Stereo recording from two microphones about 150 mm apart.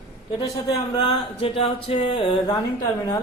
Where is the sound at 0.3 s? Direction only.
30° left (ahead or behind).